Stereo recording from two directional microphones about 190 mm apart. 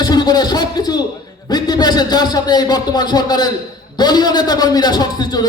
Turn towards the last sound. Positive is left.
turn(degrees=20)  # may be behind; listen again after turning